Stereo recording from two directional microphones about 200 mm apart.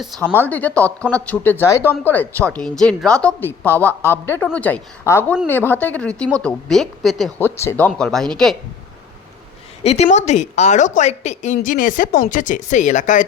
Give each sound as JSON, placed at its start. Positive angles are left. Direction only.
{"t": 0.0, "sound": "a woman's voice", "side_deg": 0}
{"t": 7.3, "sound": "a woman's voice", "side_deg": 10}
{"t": 9.8, "sound": "speech", "side_deg": 30}